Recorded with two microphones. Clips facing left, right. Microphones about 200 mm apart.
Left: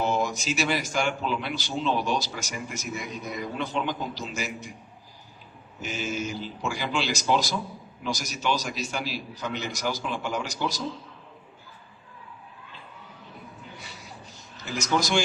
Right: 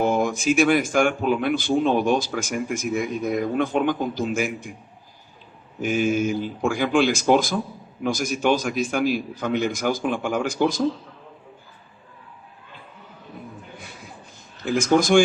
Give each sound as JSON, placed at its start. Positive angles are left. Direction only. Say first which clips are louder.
{"t": 0.0, "sound": "speech", "louder": "right 6 dB", "side_deg": -55}
{"t": 5.8, "sound": "speech", "louder": "right 10 dB", "side_deg": -55}
{"t": 13.7, "sound": "a sound", "louder": "right 3 dB", "side_deg": -50}
{"t": 14.6, "sound": "speech", "louder": "right 8 dB", "side_deg": -50}